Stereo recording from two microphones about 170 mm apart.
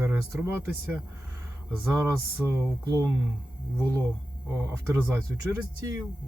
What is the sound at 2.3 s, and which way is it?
Speech, 15° right (ahead or behind).